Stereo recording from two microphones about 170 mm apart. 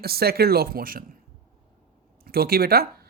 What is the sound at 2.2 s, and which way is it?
Speech, 60° right (ahead or behind).